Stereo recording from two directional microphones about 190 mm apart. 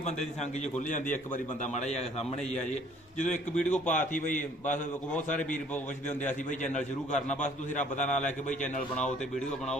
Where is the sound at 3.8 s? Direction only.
40° left (ahead or behind).